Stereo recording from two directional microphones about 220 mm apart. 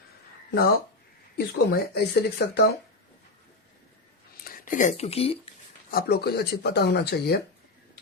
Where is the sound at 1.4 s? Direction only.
45° left (ahead or behind).